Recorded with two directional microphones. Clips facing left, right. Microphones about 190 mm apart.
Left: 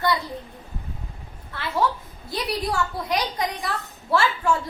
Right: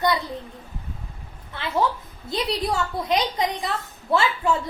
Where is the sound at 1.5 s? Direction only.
20° right (ahead or behind).